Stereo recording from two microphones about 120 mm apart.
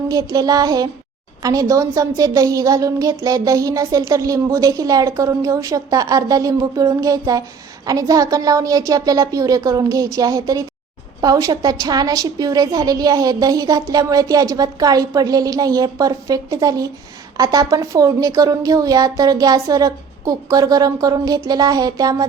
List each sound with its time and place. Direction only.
0.1 s a woman's voice: 30° right (ahead or behind)